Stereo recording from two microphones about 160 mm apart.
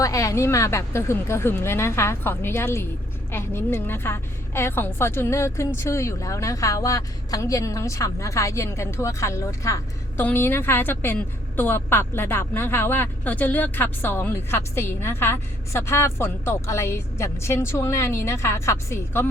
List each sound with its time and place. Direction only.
0.0 s a woman's voice: 20° left (ahead or behind)